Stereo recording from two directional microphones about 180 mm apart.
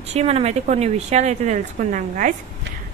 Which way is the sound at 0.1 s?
35° right (ahead or behind).